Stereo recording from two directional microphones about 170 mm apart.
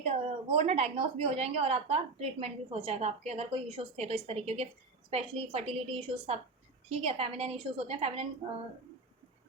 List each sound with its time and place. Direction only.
0.0 s a woman's voice: 35° right (ahead or behind)